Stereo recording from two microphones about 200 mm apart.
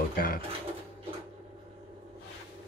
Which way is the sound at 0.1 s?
45° left (ahead or behind).